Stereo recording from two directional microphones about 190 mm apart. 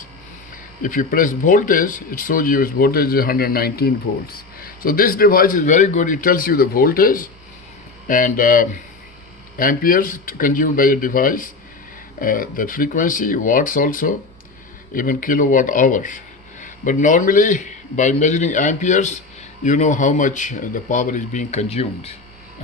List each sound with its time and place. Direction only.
0.8 s speech: 45° left (ahead or behind)